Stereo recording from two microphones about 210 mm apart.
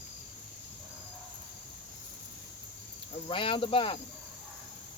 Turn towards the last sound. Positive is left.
turn(degrees=25)  # may be behind; listen again after turning